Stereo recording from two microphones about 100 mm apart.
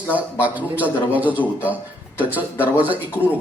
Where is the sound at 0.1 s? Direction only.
15° right (ahead or behind).